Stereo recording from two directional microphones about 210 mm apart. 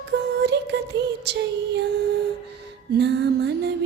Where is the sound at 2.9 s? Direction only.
55° right (ahead or behind).